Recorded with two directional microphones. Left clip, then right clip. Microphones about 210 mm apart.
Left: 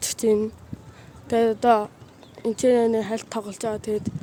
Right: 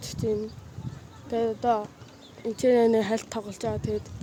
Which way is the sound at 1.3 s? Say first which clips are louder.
Left 7 dB; 35° left (ahead or behind).